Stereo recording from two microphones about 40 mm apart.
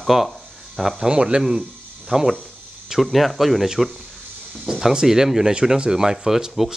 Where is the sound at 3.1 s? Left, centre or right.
Centre.